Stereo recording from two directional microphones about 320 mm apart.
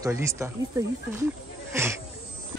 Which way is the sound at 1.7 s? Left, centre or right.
Centre.